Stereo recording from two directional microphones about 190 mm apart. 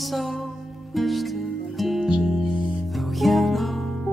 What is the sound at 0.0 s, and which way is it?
Music, centre (ahead or behind).